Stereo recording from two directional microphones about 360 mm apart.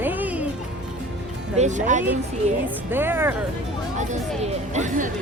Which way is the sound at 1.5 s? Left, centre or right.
Centre.